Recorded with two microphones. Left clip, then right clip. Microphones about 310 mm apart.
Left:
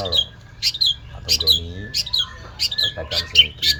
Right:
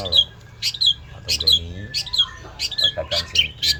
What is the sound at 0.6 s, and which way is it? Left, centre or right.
Bird, centre.